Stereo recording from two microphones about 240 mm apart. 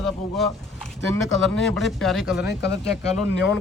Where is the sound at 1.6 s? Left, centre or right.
Centre.